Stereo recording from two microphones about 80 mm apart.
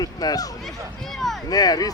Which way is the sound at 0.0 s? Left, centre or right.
Left.